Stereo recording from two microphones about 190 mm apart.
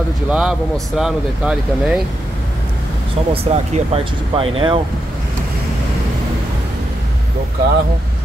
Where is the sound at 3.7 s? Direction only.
30° right (ahead or behind).